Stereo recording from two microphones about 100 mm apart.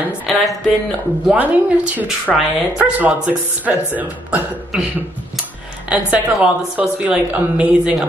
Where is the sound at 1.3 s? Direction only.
15° right (ahead or behind).